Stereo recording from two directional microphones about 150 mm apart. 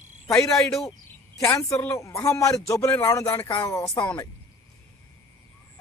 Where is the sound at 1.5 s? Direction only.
20° left (ahead or behind).